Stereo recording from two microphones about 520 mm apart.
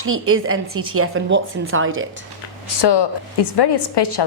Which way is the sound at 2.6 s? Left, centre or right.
Left.